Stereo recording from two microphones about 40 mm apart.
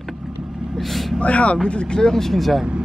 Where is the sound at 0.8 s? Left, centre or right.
Centre.